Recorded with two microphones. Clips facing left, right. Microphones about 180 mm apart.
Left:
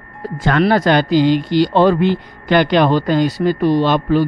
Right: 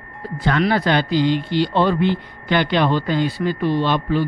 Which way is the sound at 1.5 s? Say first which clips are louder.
Left 5 dB; 40° left (ahead or behind).